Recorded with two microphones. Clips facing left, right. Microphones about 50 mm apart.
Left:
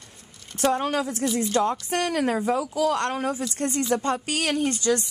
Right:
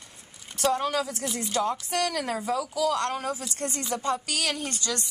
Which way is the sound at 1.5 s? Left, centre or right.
Left.